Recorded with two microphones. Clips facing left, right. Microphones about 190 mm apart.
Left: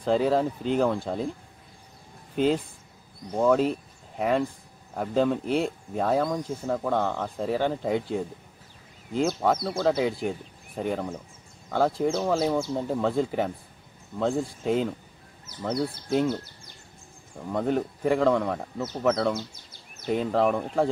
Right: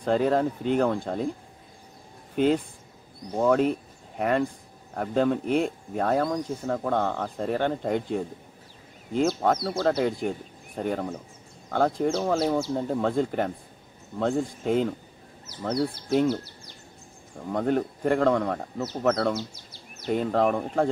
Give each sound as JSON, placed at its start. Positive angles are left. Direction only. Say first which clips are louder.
{"t": 0.0, "sound": "speech", "louder": "even", "side_deg": 5}
{"t": 2.3, "sound": "speech", "louder": "right 1 dB", "side_deg": 0}
{"t": 9.4, "sound": "speech", "louder": "even", "side_deg": 0}
{"t": 17.5, "sound": "speech", "louder": "right 1 dB", "side_deg": 0}
{"t": 19.3, "sound": "bird", "louder": "right 1 dB", "side_deg": 50}
{"t": 20.1, "sound": "speech", "louder": "even", "side_deg": 0}